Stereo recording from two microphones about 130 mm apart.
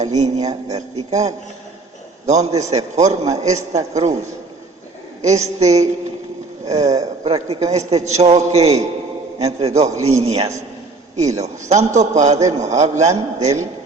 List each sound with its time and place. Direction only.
0.0 s a man's voice: 60° right (ahead or behind)
5.5 s a man's voice: 55° right (ahead or behind)